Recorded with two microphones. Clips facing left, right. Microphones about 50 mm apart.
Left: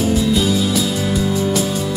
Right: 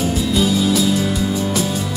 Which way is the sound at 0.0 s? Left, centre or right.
Centre.